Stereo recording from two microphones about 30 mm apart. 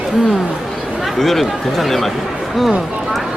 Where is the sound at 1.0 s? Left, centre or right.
Centre.